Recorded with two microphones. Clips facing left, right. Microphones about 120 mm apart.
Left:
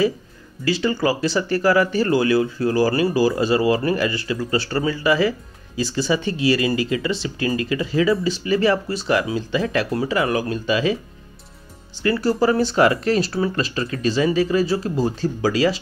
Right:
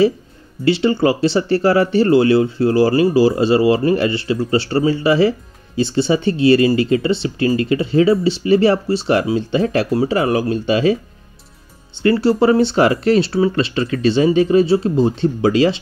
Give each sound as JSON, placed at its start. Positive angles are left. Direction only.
{"t": 0.7, "sound": "speech", "side_deg": -30}
{"t": 12.0, "sound": "speech", "side_deg": -30}